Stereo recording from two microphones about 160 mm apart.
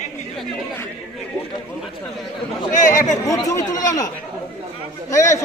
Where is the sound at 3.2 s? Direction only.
20° left (ahead or behind).